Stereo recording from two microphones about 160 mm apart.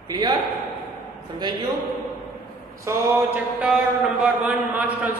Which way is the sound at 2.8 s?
20° right (ahead or behind).